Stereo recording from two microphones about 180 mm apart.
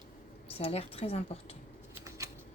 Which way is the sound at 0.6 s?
35° left (ahead or behind).